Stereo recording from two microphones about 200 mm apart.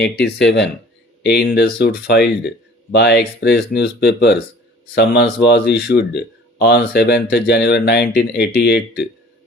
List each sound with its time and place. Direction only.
0.0 s speech: 55° left (ahead or behind)